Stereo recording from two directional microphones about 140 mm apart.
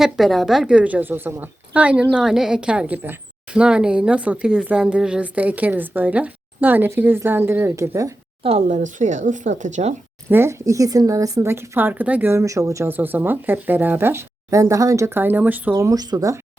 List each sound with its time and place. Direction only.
0.0 s a woman's voice: centre (ahead or behind); by 8.1 s 20° right (ahead or behind)
8.4 s speech: 55° right (ahead or behind)
10.2 s speech: 15° right (ahead or behind)